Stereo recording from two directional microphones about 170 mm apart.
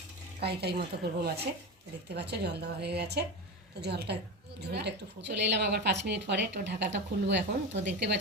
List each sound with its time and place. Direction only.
0.3 s speech: 70° right (ahead or behind); by 7.9 s 90° right